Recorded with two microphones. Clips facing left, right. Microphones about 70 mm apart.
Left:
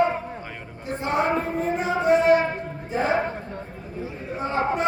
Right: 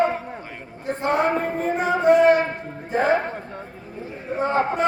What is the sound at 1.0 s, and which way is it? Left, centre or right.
Speech, right.